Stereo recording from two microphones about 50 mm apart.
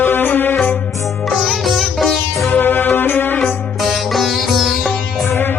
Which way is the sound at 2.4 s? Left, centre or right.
Left.